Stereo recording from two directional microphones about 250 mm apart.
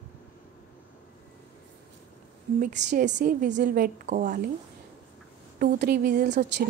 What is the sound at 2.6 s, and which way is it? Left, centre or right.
A woman's voice, right.